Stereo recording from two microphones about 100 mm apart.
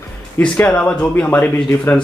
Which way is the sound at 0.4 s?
10° left (ahead or behind).